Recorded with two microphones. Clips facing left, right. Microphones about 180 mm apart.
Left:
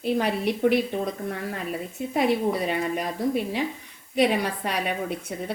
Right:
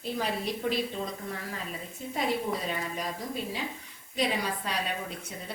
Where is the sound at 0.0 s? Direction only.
65° left (ahead or behind).